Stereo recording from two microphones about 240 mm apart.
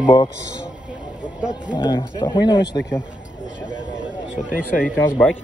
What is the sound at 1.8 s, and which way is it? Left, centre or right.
Speech, centre.